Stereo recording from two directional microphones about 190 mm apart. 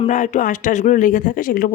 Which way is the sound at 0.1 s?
40° left (ahead or behind).